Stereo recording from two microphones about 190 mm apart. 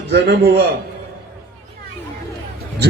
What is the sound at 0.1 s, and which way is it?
Speech, 60° right (ahead or behind).